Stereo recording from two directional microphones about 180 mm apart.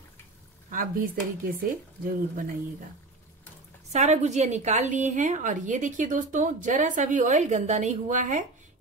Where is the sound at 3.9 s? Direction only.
40° right (ahead or behind).